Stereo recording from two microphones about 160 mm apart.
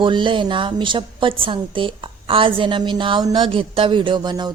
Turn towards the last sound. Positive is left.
turn(degrees=-25)  # may be behind; listen again after turning